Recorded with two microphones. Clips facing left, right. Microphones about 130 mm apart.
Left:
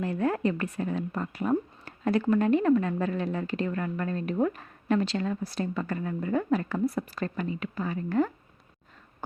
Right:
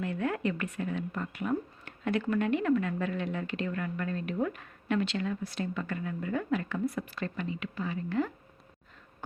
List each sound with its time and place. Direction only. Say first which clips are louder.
0.0 s a woman's voice: left 4 dB; 35° left (ahead or behind)